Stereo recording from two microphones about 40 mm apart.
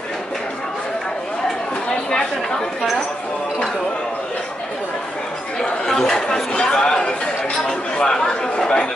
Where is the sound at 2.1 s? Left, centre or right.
Centre.